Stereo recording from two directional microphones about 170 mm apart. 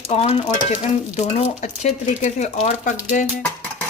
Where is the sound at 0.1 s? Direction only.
35° left (ahead or behind); by 3.3 s 50° left (ahead or behind).